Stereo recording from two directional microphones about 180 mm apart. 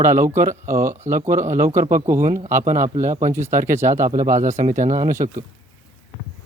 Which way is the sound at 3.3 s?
15° right (ahead or behind).